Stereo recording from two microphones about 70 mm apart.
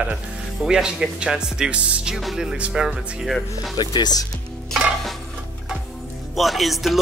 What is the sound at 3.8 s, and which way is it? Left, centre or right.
Speech, left.